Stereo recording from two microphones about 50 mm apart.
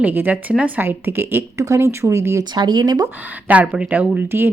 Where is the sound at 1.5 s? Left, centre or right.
Right.